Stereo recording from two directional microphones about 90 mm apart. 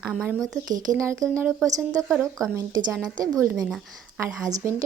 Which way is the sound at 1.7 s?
40° right (ahead or behind).